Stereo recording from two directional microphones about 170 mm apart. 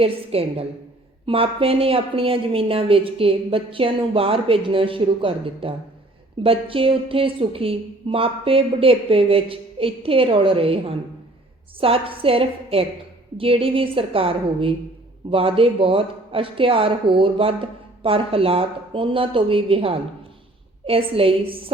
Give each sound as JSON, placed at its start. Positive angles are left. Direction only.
{"t": 0.0, "sound": "speech", "side_deg": -35}